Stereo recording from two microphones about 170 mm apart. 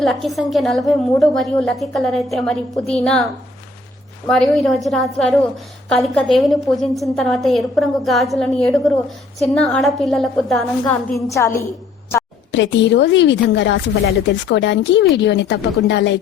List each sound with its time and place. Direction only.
0.0 s a woman's voice: centre (ahead or behind)
4.3 s a woman's voice: centre (ahead or behind)
11.3 s a woman's voice: 15° left (ahead or behind)
12.5 s a woman's voice: 90° left